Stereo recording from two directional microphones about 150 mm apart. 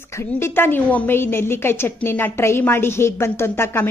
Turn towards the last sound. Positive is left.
turn(degrees=15)  # may be behind; listen again after turning